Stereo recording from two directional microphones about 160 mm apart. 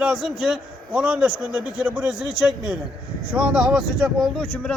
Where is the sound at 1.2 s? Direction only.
15° right (ahead or behind).